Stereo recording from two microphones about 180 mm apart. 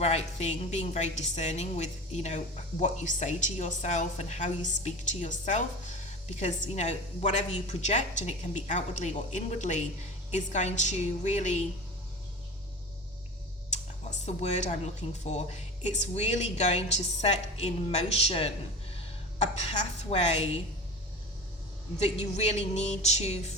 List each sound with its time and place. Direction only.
0.0 s a woman's voice: 35° left (ahead or behind)
6.3 s a woman's voice: 40° left (ahead or behind)
14.3 s a woman's voice: 40° left (ahead or behind)
21.9 s a woman's voice: 35° left (ahead or behind)